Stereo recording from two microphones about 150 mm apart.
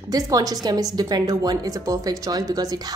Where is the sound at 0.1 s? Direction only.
25° right (ahead or behind).